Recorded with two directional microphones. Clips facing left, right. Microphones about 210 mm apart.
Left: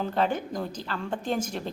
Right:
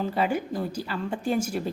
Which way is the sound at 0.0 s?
5° right (ahead or behind).